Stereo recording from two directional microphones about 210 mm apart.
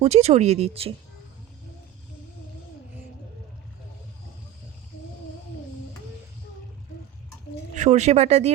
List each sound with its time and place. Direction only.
0.0 s speech: 30° right (ahead or behind)
7.8 s speech: 30° right (ahead or behind)